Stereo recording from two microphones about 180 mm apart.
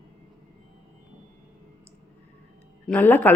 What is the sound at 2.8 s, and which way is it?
Speech, 10° left (ahead or behind).